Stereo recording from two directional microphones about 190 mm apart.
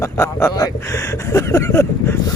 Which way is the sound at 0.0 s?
15° left (ahead or behind).